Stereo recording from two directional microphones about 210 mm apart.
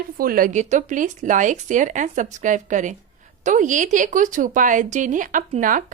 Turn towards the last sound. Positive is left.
turn(degrees=-40)  # may be behind; listen again after turning